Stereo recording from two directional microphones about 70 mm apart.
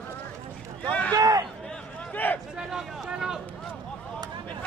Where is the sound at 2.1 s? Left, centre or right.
Left.